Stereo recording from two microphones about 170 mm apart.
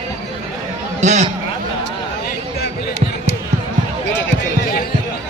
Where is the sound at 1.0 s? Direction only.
40° right (ahead or behind).